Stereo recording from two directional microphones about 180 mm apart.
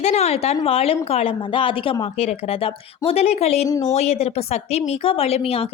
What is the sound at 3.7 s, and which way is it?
Speech, 20° left (ahead or behind).